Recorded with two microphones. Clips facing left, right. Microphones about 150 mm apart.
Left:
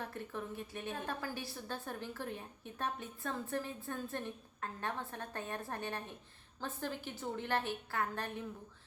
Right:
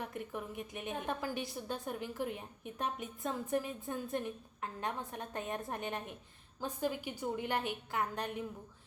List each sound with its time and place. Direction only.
0.0 s a woman's voice: 15° right (ahead or behind)